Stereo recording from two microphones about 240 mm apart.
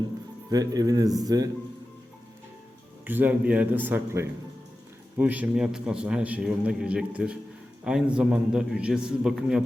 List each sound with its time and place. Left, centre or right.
0.5 s a man's voice: centre
3.1 s a man's voice: centre